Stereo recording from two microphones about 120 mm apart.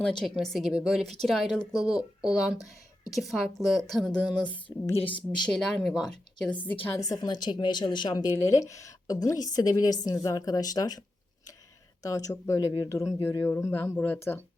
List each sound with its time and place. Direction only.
0.0 s speech: 5° left (ahead or behind)
5.5 s speech: 5° left (ahead or behind)
6.8 s a woman's voice: 25° left (ahead or behind)
12.0 s speech: 30° left (ahead or behind)